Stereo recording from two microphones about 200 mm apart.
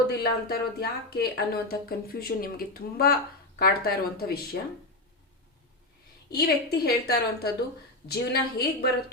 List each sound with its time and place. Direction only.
0.1 s speech: 50° left (ahead or behind)
6.3 s speech: 50° left (ahead or behind)